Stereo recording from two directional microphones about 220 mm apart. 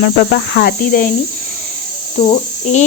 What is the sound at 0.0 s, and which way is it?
Speech, 45° left (ahead or behind).